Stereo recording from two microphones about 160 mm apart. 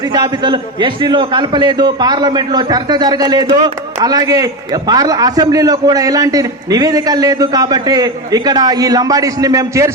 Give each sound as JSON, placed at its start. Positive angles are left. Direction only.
{"t": 0.1, "sound": "a man's voice", "side_deg": -30}